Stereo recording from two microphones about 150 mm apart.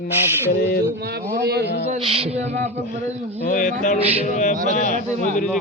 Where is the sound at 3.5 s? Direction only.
60° left (ahead or behind).